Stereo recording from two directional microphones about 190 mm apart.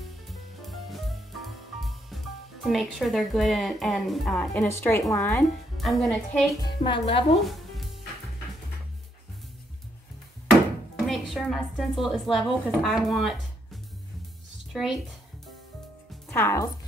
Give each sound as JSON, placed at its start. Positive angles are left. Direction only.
{"t": 0.3, "sound": "music", "side_deg": 0}
{"t": 4.6, "sound": "a woman's voice", "side_deg": 15}
{"t": 5.8, "sound": "speech", "side_deg": 0}
{"t": 6.6, "sound": "speech", "side_deg": 25}
{"t": 7.3, "sound": "music", "side_deg": 0}
{"t": 11.1, "sound": "a sound", "side_deg": 0}
{"t": 12.0, "sound": "speech", "side_deg": 0}
{"t": 14.7, "sound": "speech", "side_deg": 0}
{"t": 16.3, "sound": "a woman's voice", "side_deg": 10}